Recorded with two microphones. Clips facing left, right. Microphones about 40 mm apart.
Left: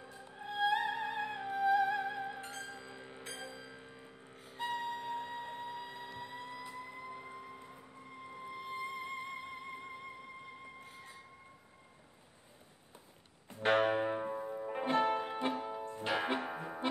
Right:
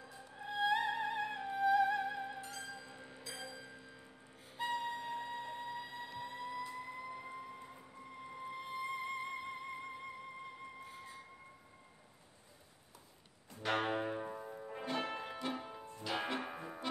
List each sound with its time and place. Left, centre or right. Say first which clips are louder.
0.1 s music: left 1 dB; centre
0.5 s music: left 1 dB; centre
2.4 s music: left 2 dB; left
4.6 s music: left 1 dB; centre
6.7 s fire engine: right 1 dB; centre
13.5 s music: left 6 dB; left
13.9 s music: left 4 dB; centre
14.7 s music: left 8 dB; left
16.3 s music: left 4 dB; centre